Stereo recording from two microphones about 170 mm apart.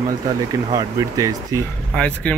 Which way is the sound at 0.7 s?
20° right (ahead or behind).